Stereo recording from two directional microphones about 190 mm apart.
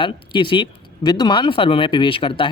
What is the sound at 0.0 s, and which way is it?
Speech, 25° left (ahead or behind).